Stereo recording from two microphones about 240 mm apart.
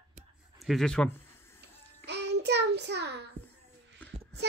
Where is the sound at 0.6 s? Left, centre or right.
Centre.